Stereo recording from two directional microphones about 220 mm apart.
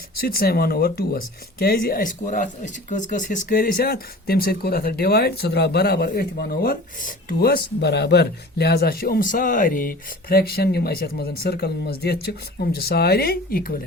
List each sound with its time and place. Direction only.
0.3 s speech: 45° left (ahead or behind)